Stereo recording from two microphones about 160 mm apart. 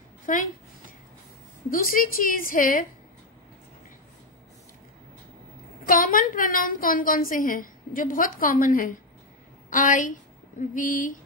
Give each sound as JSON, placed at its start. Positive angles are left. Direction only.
{"t": 0.3, "sound": "a woman's voice", "side_deg": 55}
{"t": 1.7, "sound": "a woman's voice", "side_deg": 60}
{"t": 5.9, "sound": "a woman's voice", "side_deg": 60}